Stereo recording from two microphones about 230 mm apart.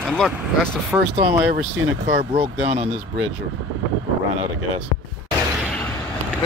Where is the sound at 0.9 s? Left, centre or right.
Centre.